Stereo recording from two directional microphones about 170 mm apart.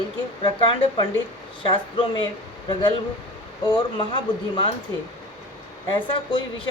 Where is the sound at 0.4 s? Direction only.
30° left (ahead or behind).